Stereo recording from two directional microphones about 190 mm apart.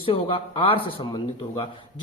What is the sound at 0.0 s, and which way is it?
Speech, 25° left (ahead or behind).